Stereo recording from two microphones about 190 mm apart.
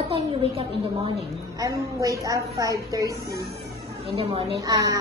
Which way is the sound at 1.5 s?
20° right (ahead or behind).